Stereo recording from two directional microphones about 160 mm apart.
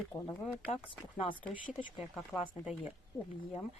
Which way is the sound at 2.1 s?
Centre (ahead or behind).